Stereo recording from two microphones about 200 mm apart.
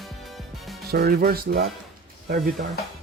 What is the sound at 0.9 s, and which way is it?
Speech, 50° right (ahead or behind).